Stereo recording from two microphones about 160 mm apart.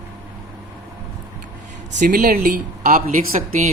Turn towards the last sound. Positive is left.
turn(degrees=-50)  # may be behind; listen again after turning